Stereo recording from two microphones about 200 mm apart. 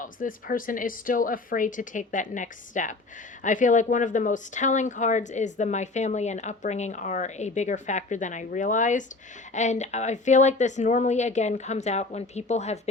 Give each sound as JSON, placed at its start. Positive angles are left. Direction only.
{"t": 0.0, "sound": "speech", "side_deg": 40}